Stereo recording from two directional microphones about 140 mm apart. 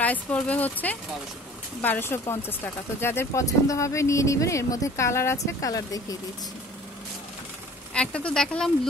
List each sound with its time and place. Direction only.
0.0 s speech: 10° left (ahead or behind)
7.9 s speech: 5° left (ahead or behind)